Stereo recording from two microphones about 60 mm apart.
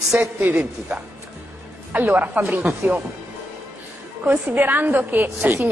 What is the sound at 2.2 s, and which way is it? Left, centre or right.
Speech, right.